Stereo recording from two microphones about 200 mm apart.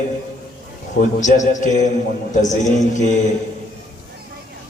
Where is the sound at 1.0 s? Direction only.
40° left (ahead or behind).